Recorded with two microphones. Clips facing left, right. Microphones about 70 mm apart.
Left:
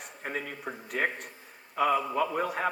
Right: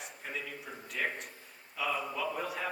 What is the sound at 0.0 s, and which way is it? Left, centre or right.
A man's voice, left.